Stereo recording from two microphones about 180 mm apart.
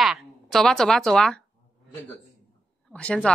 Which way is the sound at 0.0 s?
Centre (ahead or behind).